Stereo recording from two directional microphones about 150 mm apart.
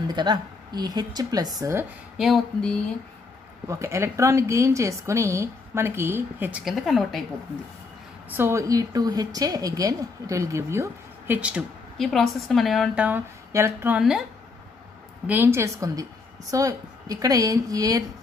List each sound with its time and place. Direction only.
0.1 s a woman's voice: 30° right (ahead or behind)
2.1 s a sound: centre (ahead or behind)
3.6 s a woman's voice: 20° right (ahead or behind)
6.6 s a sound: centre (ahead or behind)
8.4 s a woman's voice: 20° right (ahead or behind)
15.2 s a woman's voice: 15° right (ahead or behind)